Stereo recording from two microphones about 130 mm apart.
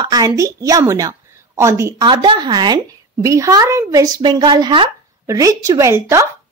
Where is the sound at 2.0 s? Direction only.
35° right (ahead or behind).